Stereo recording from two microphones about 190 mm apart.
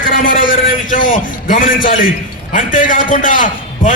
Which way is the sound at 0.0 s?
45° left (ahead or behind).